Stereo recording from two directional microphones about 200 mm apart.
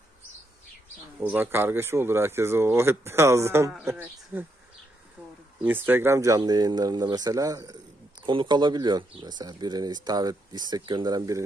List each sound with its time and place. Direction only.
1.2 s speech: 10° right (ahead or behind)
5.9 s speech: 10° right (ahead or behind)